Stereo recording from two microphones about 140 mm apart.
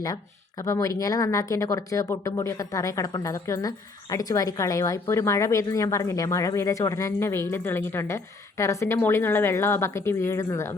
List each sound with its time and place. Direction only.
0.6 s speech: 25° left (ahead or behind)